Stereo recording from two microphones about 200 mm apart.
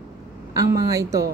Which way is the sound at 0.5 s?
15° right (ahead or behind).